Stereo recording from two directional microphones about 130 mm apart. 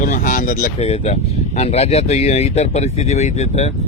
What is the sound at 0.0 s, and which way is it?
Speech, 80° left.